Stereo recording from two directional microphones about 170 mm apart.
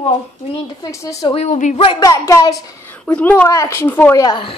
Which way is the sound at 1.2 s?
35° left (ahead or behind).